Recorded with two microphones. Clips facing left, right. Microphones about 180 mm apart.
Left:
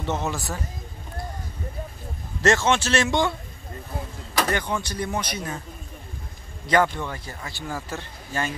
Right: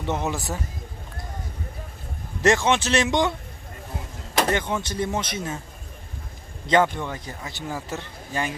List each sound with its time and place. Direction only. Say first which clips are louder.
0.0 s speech: right 1 dB; 15° right (ahead or behind)
2.4 s speech: right 1 dB; 15° right (ahead or behind)
4.4 s speech: right 2 dB; 20° right (ahead or behind)
7.0 s speech: right 1 dB; 20° right (ahead or behind)